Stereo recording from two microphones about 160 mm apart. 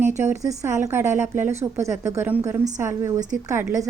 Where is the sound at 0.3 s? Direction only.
20° right (ahead or behind).